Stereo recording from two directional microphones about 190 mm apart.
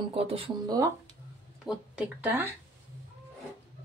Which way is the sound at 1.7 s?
10° right (ahead or behind).